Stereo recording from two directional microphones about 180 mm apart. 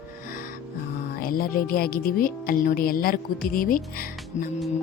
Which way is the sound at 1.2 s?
55° left (ahead or behind).